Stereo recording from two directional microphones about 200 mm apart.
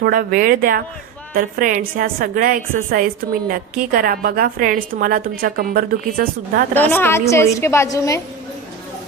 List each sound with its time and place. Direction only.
0.0 s a woman's voice: 45° right (ahead or behind)
6.7 s a woman's voice: 10° left (ahead or behind)